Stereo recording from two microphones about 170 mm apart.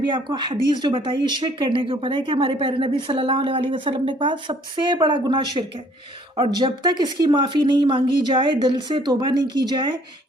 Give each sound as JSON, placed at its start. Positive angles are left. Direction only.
{"t": 0.0, "sound": "speech", "side_deg": -25}